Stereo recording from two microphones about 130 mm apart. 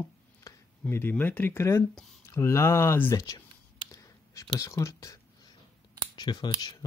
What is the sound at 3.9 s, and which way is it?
Whispering, 25° left (ahead or behind).